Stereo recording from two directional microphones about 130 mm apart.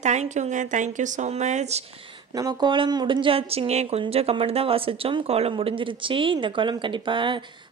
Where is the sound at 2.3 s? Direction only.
30° right (ahead or behind).